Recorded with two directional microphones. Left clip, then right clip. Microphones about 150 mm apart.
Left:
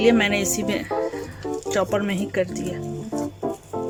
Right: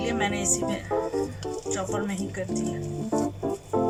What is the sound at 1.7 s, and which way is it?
Speech, 65° left (ahead or behind).